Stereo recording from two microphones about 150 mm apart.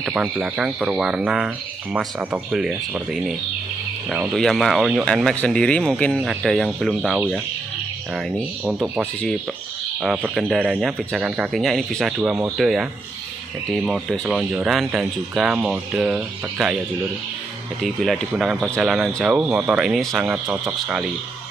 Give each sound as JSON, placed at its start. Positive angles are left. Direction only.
{"t": 0.0, "sound": "speech", "side_deg": -5}
{"t": 10.0, "sound": "speech", "side_deg": -10}
{"t": 12.2, "sound": "speech", "side_deg": -15}
{"t": 12.5, "sound": "speech", "side_deg": 0}
{"t": 13.8, "sound": "speech", "side_deg": 0}
{"t": 17.8, "sound": "speech", "side_deg": 0}
{"t": 19.3, "sound": "speech", "side_deg": -15}
{"t": 19.8, "sound": "speech", "side_deg": 0}